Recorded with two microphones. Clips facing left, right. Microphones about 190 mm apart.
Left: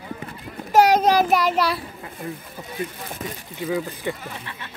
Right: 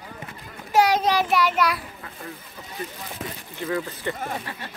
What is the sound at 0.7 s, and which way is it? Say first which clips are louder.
A child's voice: left 4 dB; 45° left (ahead or behind).